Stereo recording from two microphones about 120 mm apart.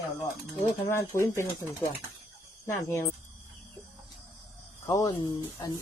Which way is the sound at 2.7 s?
20° left (ahead or behind).